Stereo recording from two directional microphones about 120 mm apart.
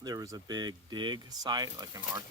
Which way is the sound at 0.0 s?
30° right (ahead or behind).